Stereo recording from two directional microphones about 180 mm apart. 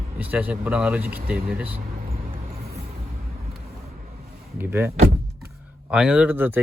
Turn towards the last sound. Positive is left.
turn(degrees=-10)  # may be behind; listen again after turning